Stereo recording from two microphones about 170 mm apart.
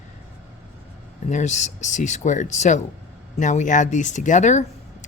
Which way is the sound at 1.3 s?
45° left (ahead or behind).